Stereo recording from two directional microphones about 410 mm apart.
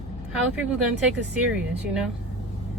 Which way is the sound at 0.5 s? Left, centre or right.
Centre.